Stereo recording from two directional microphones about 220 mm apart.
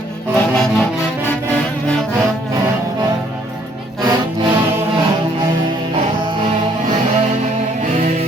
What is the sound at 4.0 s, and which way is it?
Music, 20° right (ahead or behind).